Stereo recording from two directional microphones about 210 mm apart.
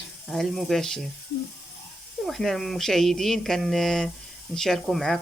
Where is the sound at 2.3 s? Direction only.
Centre (ahead or behind).